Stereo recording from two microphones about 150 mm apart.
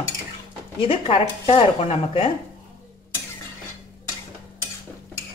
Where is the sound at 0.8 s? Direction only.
40° left (ahead or behind).